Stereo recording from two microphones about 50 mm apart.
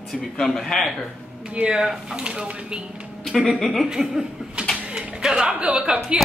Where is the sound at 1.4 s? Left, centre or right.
Right.